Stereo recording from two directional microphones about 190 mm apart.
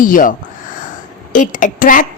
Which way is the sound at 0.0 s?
45° left (ahead or behind).